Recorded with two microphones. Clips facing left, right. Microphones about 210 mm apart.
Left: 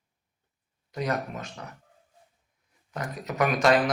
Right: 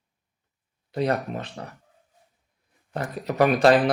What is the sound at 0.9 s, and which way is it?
Speech, 30° right (ahead or behind).